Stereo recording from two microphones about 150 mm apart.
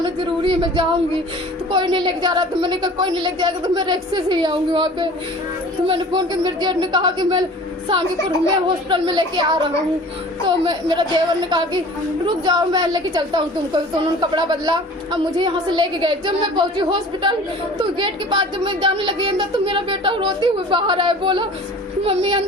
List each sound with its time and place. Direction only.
0.0 s a woman's voice: 30° right (ahead or behind)
8.6 s a woman's voice: 30° right (ahead or behind)